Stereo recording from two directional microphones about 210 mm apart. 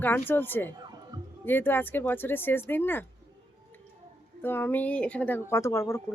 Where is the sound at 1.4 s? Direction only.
10° left (ahead or behind).